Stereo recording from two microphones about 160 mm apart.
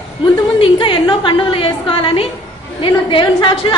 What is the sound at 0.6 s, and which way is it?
A woman's voice, 30° left (ahead or behind).